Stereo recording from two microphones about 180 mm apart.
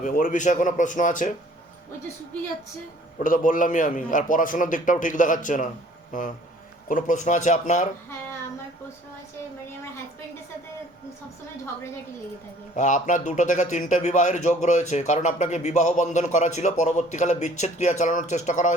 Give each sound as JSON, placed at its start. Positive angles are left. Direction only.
{"t": 0.0, "sound": "a man's voice", "side_deg": 45}
{"t": 3.2, "sound": "a man's voice", "side_deg": 45}
{"t": 12.7, "sound": "a man's voice", "side_deg": 45}